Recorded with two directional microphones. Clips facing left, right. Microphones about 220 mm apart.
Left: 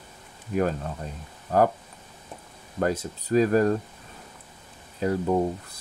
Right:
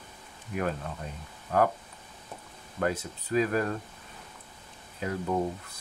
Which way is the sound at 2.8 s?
40° left (ahead or behind).